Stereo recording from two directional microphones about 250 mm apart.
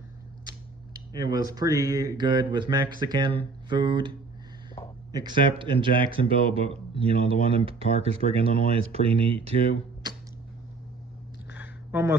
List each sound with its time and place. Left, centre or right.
1.1 s speech: centre
5.1 s speech: centre
11.5 s a sound: centre